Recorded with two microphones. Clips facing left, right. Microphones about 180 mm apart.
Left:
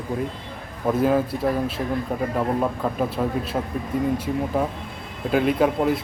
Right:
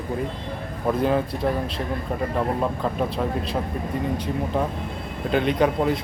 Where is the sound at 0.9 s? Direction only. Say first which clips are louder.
Left 2 dB; 5° left (ahead or behind).